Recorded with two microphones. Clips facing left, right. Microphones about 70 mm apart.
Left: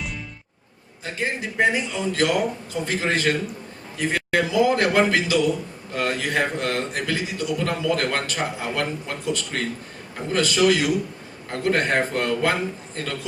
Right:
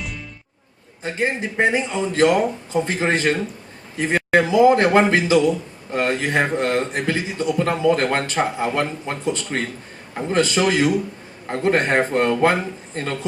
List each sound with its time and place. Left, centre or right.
1.0 s a man's voice: right